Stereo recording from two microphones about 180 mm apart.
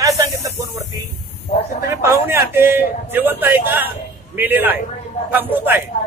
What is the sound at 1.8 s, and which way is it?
A man's voice, 15° right (ahead or behind).